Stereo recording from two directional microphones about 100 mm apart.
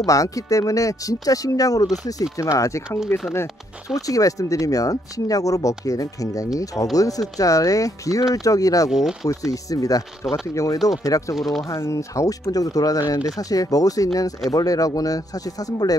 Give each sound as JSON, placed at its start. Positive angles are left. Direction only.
{"t": 0.0, "sound": "speech", "side_deg": 35}
{"t": 8.9, "sound": "speech", "side_deg": -5}
{"t": 9.3, "sound": "speech", "side_deg": 35}
{"t": 11.3, "sound": "speech", "side_deg": 0}
{"t": 11.7, "sound": "speech", "side_deg": 30}